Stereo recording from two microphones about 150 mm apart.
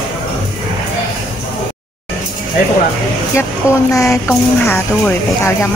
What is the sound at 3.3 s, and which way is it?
Speech, 20° left (ahead or behind).